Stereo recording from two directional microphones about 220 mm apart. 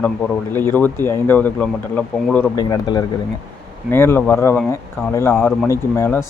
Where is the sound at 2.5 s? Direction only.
15° left (ahead or behind).